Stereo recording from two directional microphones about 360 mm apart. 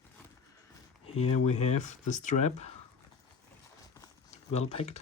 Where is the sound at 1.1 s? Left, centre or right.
Centre.